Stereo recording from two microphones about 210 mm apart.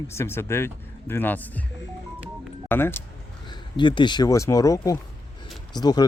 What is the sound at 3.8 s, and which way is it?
Speech, 20° left (ahead or behind).